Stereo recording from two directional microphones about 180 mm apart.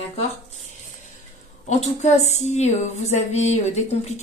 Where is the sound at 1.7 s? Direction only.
40° left (ahead or behind).